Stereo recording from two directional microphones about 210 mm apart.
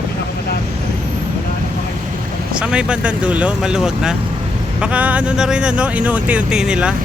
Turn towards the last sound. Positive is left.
turn(degrees=-5)  # may be behind; listen again after turning